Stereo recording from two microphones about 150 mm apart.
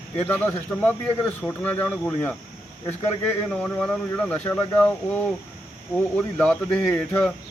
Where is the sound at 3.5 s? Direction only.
5° left (ahead or behind).